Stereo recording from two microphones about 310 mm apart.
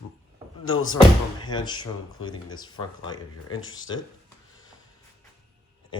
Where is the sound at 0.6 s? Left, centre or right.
Left.